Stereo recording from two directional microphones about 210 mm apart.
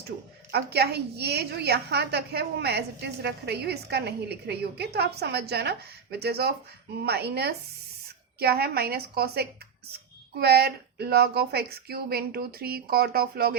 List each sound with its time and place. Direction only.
0.5 s a woman's voice: 50° right (ahead or behind)